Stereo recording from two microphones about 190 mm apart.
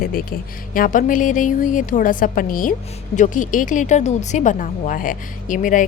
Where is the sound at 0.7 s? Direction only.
45° left (ahead or behind).